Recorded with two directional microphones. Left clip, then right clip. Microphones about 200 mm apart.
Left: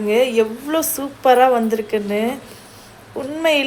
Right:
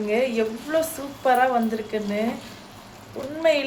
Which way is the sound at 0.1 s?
30° left (ahead or behind).